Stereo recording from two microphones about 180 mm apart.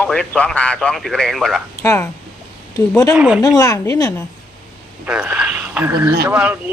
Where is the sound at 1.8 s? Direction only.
15° left (ahead or behind).